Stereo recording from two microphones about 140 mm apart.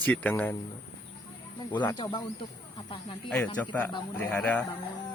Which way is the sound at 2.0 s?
30° left (ahead or behind).